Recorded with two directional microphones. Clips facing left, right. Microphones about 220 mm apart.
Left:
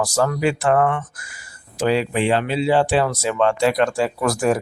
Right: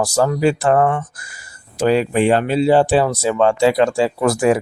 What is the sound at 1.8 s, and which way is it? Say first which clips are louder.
Speech: right 4 dB; 45° right (ahead or behind).